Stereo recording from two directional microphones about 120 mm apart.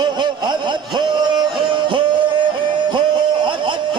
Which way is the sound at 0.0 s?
40° right (ahead or behind).